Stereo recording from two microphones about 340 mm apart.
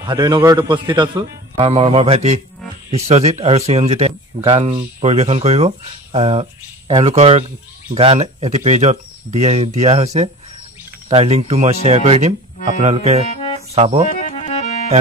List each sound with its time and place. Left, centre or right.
0.0 s speech: centre
13.3 s music: centre
13.7 s speech: centre
14.1 s music: left